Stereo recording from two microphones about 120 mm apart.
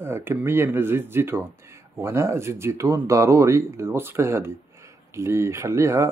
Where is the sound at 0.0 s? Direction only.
20° right (ahead or behind).